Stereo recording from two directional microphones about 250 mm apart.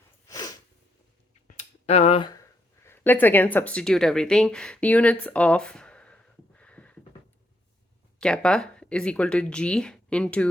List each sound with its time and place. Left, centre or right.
0.3 s sneeze: centre
1.5 s a sound: left
2.8 s speech: centre
8.2 s speech: centre